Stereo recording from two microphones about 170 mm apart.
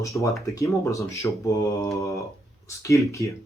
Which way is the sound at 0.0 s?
20° left (ahead or behind).